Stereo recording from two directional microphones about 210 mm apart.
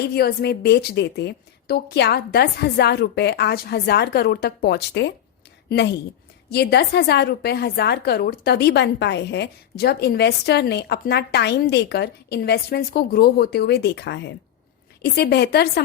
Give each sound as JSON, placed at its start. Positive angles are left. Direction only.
{"t": 0.1, "sound": "a woman's voice", "side_deg": 50}